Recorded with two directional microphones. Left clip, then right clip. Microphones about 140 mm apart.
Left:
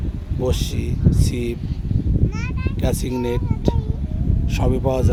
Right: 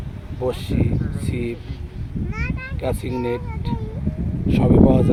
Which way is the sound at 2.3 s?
45° right (ahead or behind).